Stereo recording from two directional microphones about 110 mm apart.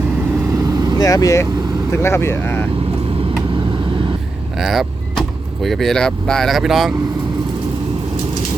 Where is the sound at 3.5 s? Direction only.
45° right (ahead or behind).